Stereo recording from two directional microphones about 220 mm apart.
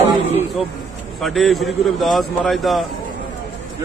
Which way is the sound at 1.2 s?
Centre (ahead or behind).